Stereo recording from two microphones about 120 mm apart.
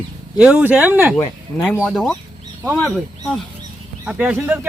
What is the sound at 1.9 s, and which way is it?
Speech, centre (ahead or behind).